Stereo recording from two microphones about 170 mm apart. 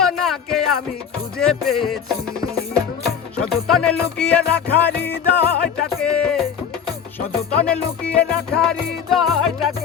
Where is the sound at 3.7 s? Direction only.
5° left (ahead or behind).